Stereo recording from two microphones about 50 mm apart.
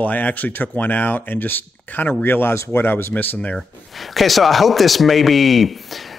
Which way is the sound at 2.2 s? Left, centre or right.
Left.